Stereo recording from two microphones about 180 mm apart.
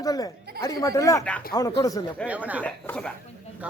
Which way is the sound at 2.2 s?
10° right (ahead or behind).